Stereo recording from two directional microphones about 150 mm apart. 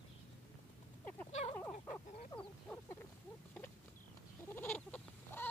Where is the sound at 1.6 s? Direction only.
10° left (ahead or behind).